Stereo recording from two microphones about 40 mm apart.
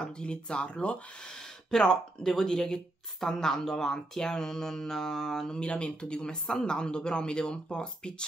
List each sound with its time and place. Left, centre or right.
0.0 s a woman's voice: left
5.6 s speech: left